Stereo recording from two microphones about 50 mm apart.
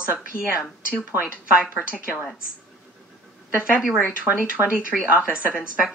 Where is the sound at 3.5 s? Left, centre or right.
Right.